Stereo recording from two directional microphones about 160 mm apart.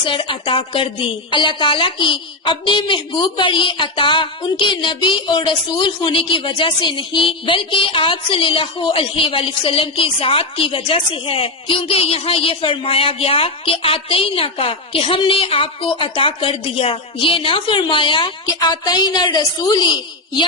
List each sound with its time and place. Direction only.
0.0 s a woman's voice: 30° left (ahead or behind)